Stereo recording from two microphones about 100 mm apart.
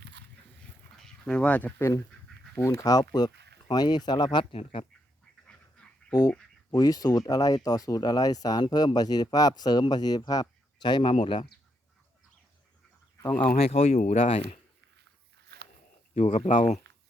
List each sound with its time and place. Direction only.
0.9 s speech: 5° left (ahead or behind)
2.7 s speech: 40° left (ahead or behind)
4.5 s speech: 75° left (ahead or behind)
5.5 s dog: 10° left (ahead or behind)
6.7 s a man's voice: 40° left (ahead or behind)
11.1 s speech: 60° left (ahead or behind)
13.6 s speech: 85° left
16.1 s speech: 90° left